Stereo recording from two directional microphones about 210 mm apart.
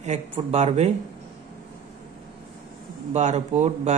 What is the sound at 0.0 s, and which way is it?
Speech, 30° right (ahead or behind).